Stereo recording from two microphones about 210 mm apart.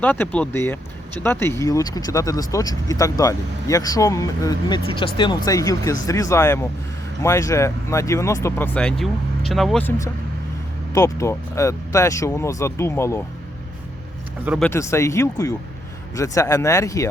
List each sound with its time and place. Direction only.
0.0 s speech: 5° left (ahead or behind)
14.6 s speech: 10° left (ahead or behind)